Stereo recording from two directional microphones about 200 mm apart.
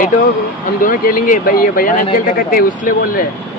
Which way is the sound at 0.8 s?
45° left (ahead or behind).